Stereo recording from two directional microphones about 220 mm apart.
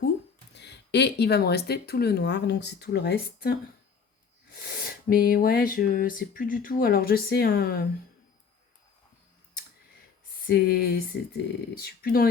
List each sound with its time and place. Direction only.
0.5 s speech: 50° left (ahead or behind)
10.4 s speech: 45° left (ahead or behind)